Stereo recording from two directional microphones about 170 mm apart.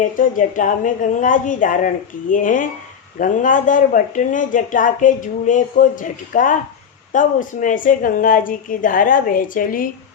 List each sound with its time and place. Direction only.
0.0 s a woman's voice: 50° left (ahead or behind)